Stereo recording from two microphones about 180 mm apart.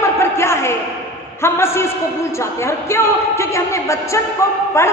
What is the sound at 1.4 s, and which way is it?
Speech, 15° left (ahead or behind).